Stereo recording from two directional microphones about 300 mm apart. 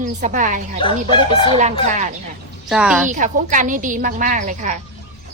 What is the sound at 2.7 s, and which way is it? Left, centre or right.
Speech, centre.